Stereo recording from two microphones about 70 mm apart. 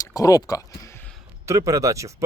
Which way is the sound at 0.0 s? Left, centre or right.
Left.